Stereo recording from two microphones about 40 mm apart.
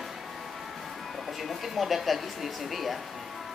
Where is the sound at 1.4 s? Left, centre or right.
Centre.